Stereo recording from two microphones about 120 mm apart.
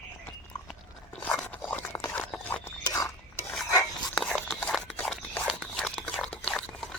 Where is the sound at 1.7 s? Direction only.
15° left (ahead or behind).